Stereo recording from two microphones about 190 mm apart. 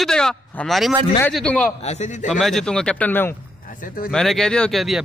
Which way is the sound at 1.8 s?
35° left (ahead or behind).